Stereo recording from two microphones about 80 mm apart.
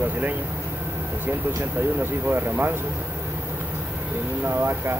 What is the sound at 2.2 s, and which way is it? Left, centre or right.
Speech, right.